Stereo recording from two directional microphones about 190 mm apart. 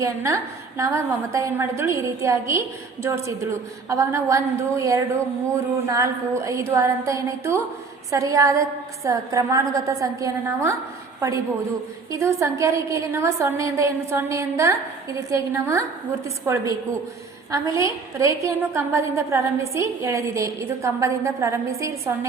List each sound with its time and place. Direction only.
0.0 s a woman's voice: 15° right (ahead or behind)